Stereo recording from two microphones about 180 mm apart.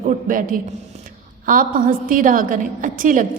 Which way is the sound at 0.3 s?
50° right (ahead or behind).